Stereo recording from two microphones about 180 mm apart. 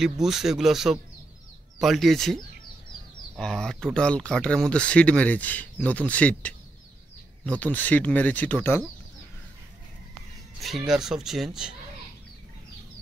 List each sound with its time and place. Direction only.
0.0 s speech: centre (ahead or behind)
10.6 s speech: centre (ahead or behind)